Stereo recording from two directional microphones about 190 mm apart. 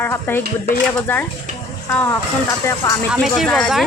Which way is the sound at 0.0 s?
10° left (ahead or behind).